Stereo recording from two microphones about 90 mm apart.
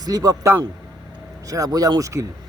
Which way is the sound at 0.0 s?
45° right (ahead or behind).